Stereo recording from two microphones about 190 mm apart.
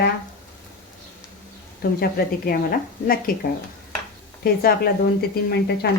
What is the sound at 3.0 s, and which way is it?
Speech, 50° left (ahead or behind).